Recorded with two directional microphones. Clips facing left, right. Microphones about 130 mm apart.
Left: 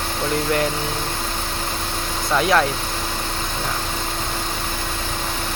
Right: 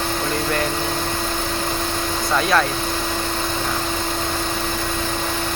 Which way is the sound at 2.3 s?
15° left (ahead or behind).